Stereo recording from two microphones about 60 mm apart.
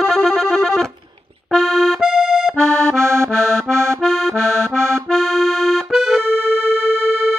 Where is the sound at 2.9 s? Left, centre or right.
Right.